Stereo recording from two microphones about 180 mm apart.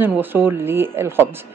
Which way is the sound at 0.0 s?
10° right (ahead or behind).